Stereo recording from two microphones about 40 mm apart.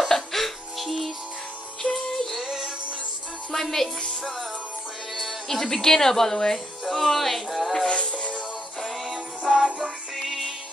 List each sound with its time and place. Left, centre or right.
0.1 s music: centre
2.3 s music: centre
5.5 s a woman's voice: centre
6.9 s music: centre
7.8 s music: left
9.5 s music: centre
10.1 s music: centre